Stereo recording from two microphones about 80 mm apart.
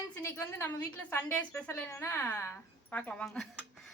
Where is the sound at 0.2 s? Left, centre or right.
Left.